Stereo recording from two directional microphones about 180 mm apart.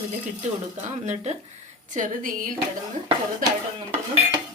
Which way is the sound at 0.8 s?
40° right (ahead or behind).